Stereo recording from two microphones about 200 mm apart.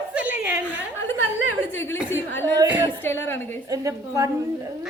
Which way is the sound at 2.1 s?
10° left (ahead or behind).